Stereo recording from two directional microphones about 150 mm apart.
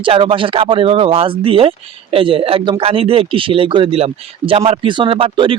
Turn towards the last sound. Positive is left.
turn(degrees=-35)  # may be behind; listen again after turning